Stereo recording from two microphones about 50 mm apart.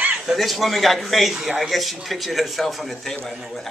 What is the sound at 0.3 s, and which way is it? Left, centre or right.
Speech, centre.